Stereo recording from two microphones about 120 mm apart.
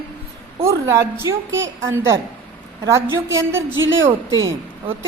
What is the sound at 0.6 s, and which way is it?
A woman's voice, 25° right (ahead or behind).